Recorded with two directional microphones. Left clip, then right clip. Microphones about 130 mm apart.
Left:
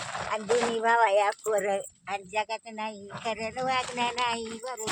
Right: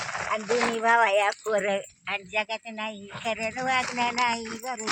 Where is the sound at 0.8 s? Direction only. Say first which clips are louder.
Right 2 dB; 10° left (ahead or behind).